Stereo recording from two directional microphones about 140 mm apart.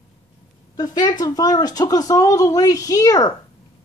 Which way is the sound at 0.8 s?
30° left (ahead or behind).